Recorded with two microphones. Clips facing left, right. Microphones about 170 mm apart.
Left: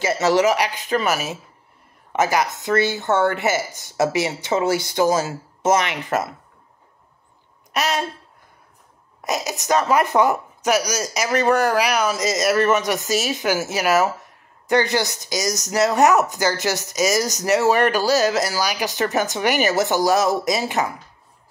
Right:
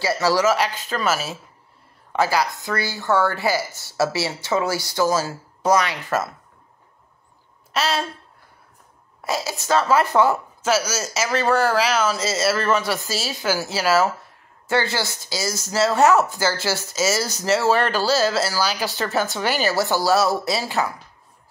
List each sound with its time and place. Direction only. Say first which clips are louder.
0.0 s speech: left 2 dB; 20° left (ahead or behind)
7.7 s a sound: even; 15° left (ahead or behind)
9.2 s speech: left 1 dB; 20° left (ahead or behind)